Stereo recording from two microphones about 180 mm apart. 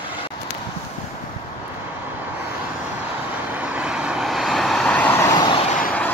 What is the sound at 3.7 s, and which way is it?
Vehicle, 5° right (ahead or behind).